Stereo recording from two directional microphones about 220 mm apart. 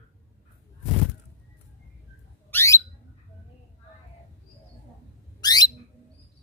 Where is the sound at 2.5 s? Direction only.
15° left (ahead or behind).